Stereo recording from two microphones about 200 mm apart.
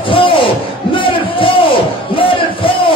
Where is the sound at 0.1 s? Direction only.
25° left (ahead or behind).